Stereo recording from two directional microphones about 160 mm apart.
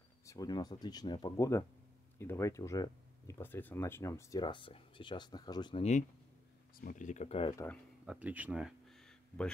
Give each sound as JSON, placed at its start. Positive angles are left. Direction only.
{"t": 0.3, "sound": "speech", "side_deg": 25}
{"t": 5.8, "sound": "speech", "side_deg": 45}
{"t": 6.8, "sound": "speech", "side_deg": 55}
{"t": 8.1, "sound": "a sound", "side_deg": -10}